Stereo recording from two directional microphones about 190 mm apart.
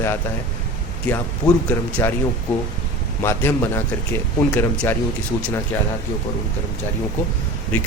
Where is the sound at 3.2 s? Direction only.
15° left (ahead or behind).